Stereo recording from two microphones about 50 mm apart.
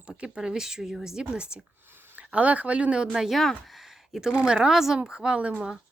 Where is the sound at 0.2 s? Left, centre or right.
Centre.